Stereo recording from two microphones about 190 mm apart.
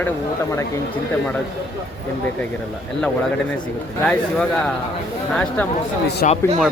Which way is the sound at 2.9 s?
5° left (ahead or behind).